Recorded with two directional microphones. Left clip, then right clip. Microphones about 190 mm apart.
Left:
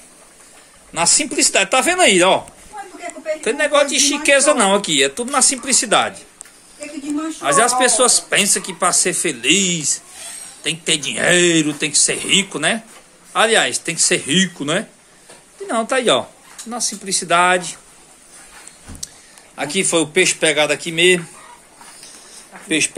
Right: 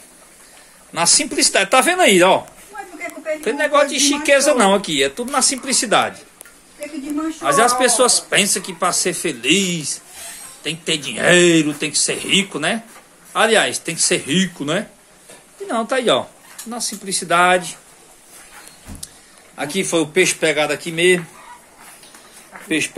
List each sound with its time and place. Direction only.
0.9 s speech: centre (ahead or behind)
3.4 s speech: centre (ahead or behind)
7.4 s speech: centre (ahead or behind)
19.5 s speech: centre (ahead or behind)